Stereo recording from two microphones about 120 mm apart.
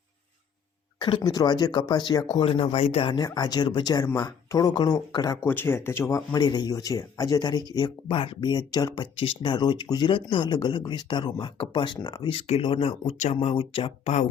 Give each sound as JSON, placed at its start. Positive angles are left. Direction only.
{"t": 0.9, "sound": "speech", "side_deg": 40}
{"t": 2.4, "sound": "speech", "side_deg": 50}
{"t": 3.2, "sound": "speech", "side_deg": 35}
{"t": 8.0, "sound": "speech", "side_deg": 50}
{"t": 12.3, "sound": "speech", "side_deg": 50}
{"t": 13.3, "sound": "speech", "side_deg": 45}